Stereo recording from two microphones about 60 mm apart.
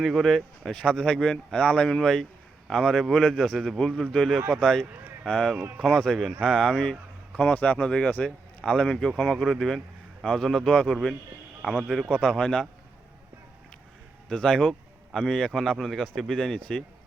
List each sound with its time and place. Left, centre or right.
0.0 s a man's voice: centre
7.3 s a man's voice: left; by 12.1 s centre
12.1 s a man's voice: centre
14.3 s a man's voice: centre